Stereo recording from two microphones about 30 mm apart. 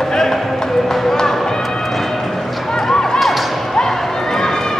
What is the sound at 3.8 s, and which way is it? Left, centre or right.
Run, centre.